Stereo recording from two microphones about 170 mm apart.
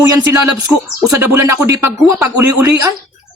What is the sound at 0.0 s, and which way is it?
Speech, 20° right (ahead or behind).